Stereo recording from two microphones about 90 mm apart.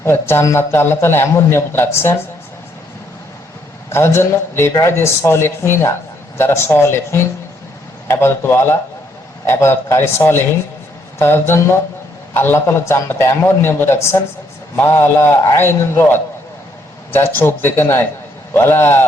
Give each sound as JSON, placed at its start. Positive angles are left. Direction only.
{"t": 0.0, "sound": "a man's voice", "side_deg": 30}
{"t": 3.9, "sound": "a man's voice", "side_deg": 30}
{"t": 17.3, "sound": "a man's voice", "side_deg": 25}